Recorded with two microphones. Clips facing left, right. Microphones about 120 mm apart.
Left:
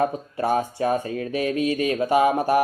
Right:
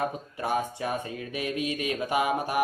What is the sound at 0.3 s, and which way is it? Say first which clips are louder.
Speech: left 7 dB; 40° left (ahead or behind).